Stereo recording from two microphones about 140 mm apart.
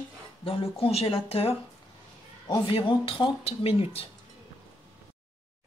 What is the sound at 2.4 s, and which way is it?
Speech, 30° left (ahead or behind).